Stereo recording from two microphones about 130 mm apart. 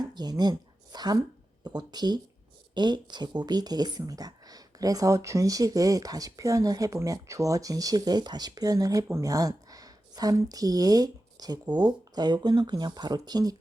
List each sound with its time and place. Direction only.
0.0 s speech: 30° right (ahead or behind)